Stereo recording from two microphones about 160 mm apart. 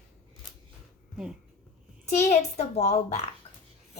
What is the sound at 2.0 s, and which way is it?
A child's voice, 45° left (ahead or behind).